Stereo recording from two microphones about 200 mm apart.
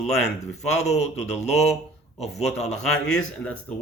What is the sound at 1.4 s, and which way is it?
Speech, 35° left (ahead or behind).